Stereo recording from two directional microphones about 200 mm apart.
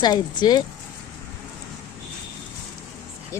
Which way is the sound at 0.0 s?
20° left (ahead or behind).